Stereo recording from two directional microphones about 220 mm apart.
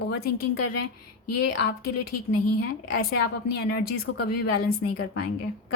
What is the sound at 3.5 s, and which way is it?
Speech, 45° left (ahead or behind).